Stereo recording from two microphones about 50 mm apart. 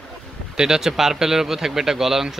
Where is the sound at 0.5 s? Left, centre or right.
Centre.